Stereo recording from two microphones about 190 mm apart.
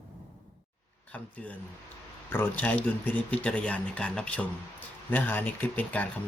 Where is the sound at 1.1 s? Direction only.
10° left (ahead or behind).